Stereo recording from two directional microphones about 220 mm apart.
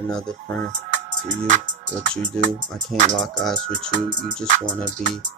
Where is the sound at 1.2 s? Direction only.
30° right (ahead or behind).